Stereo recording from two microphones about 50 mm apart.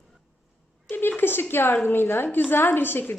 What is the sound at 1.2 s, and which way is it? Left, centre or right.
A woman's voice, left.